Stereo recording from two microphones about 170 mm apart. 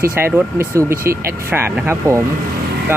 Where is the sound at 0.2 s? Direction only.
15° right (ahead or behind).